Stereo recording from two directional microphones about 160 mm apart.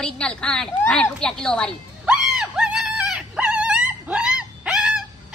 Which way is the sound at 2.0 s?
5° right (ahead or behind).